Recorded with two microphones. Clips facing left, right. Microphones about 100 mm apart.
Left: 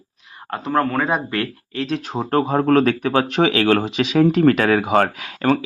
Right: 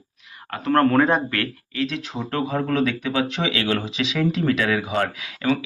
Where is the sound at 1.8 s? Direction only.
40° left (ahead or behind).